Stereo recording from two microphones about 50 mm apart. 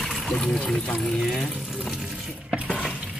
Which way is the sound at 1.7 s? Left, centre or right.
Centre.